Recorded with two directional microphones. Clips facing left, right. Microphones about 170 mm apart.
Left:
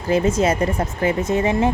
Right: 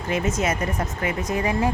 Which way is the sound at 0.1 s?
30° left (ahead or behind).